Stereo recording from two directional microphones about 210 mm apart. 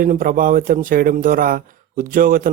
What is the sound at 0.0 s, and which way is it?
Speech, 40° right (ahead or behind).